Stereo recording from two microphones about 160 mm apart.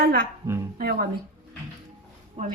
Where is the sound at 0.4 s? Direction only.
15° right (ahead or behind).